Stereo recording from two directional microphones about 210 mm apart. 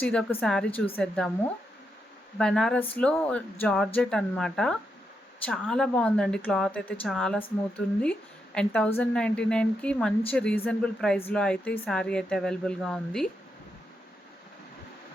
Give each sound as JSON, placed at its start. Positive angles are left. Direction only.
{"t": 0.0, "sound": "speech", "side_deg": 5}
{"t": 2.4, "sound": "speech", "side_deg": 5}
{"t": 8.5, "sound": "speech", "side_deg": 5}